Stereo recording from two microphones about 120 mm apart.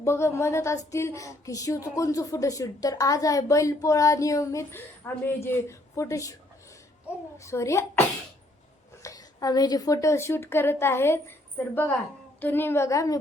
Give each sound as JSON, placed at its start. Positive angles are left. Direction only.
{"t": 0.0, "sound": "speech", "side_deg": 20}
{"t": 7.3, "sound": "a woman's voice", "side_deg": 25}